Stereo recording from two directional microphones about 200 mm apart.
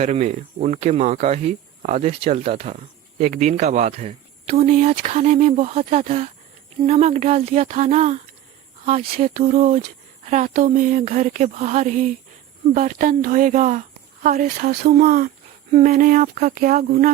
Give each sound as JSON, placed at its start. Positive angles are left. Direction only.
{"t": 0.0, "sound": "speech", "side_deg": -35}